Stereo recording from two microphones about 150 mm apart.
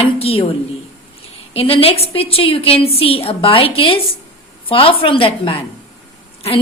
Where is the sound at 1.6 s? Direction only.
40° left (ahead or behind).